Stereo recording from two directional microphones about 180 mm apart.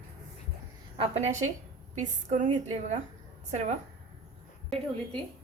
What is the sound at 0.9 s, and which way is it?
A woman's voice, 35° right (ahead or behind).